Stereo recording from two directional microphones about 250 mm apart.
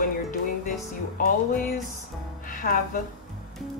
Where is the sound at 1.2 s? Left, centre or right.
Left.